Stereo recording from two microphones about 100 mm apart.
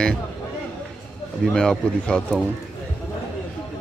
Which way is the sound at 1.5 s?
5° left (ahead or behind).